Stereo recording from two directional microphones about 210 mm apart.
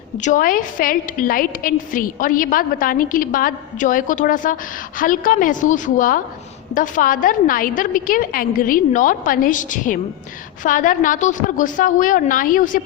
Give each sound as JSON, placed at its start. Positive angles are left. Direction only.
{"t": 0.2, "sound": "a woman's voice", "side_deg": 40}